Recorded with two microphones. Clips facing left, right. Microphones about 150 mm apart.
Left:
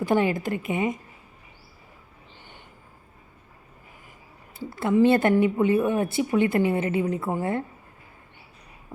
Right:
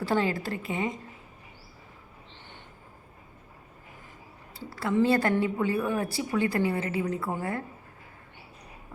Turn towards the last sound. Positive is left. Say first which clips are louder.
# left 5 dB
turn(degrees=25)  # may be behind; listen again after turning